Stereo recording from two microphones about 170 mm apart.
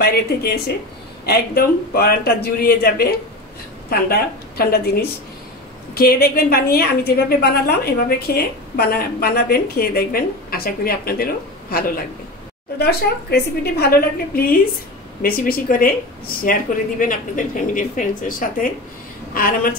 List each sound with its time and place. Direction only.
0.0 s a woman's voice: 65° left (ahead or behind)
12.7 s a woman's voice: 70° left (ahead or behind)